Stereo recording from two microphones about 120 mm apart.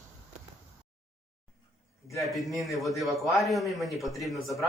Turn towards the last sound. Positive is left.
turn(degrees=0)  # may be behind; listen again after turning